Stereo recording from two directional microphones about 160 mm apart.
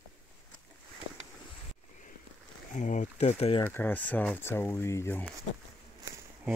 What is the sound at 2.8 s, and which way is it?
Speech, 50° left (ahead or behind).